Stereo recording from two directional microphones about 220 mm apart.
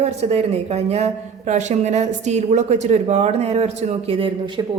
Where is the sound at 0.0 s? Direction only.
30° right (ahead or behind).